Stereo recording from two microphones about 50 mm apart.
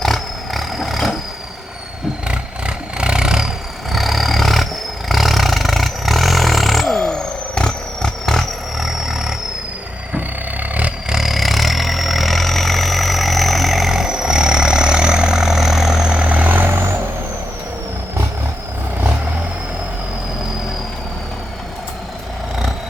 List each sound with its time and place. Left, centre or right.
0.0 s roar: centre
2.2 s roar: centre
3.9 s roar: centre
7.0 s vehicle: centre
8.8 s vehicle: centre
10.2 s vehicle: right
11.1 s vehicle: centre
16.1 s vehicle: right
16.6 s vehicle: right